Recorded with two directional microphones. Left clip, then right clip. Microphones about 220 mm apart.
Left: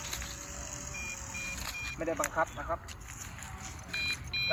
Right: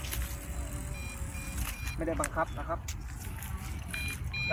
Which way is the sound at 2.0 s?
20° left (ahead or behind).